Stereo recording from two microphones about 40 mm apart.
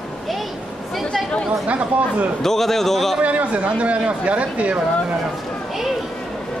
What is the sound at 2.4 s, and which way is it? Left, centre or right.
Speech, centre.